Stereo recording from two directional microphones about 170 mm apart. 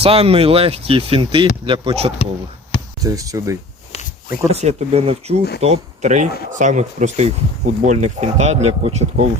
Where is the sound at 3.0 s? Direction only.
20° right (ahead or behind).